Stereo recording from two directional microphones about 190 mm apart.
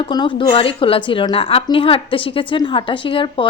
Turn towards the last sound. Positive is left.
turn(degrees=25)  # may be behind; listen again after turning